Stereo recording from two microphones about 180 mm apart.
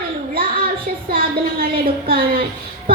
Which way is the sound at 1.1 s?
55° right (ahead or behind).